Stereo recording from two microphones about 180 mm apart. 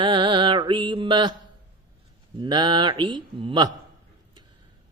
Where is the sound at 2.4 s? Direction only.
25° right (ahead or behind).